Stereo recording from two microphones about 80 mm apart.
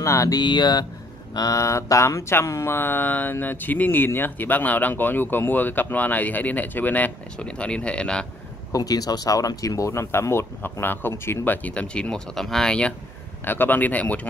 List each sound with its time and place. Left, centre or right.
0.0 s a sound: left
0.4 s speech: left
1.3 s speech: left; by 8.3 s centre
8.7 s speech: left; by 12.9 s centre
13.4 s speech: left